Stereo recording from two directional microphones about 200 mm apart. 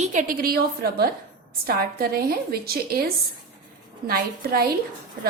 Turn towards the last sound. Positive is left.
turn(degrees=-50)  # may be behind; listen again after turning